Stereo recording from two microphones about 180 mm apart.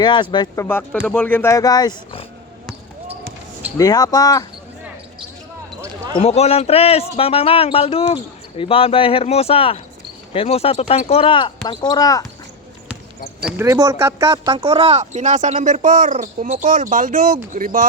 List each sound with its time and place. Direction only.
0.0 s speech: 25° left (ahead or behind)
3.8 s speech: 20° left (ahead or behind)
6.1 s speech: 35° left (ahead or behind); by 12.2 s 20° left (ahead or behind)
13.6 s speech: 20° right (ahead or behind); by 17.8 s 50° right (ahead or behind)